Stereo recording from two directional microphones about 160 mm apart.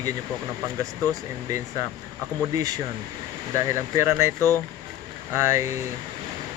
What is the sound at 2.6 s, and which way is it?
Speech, 20° right (ahead or behind).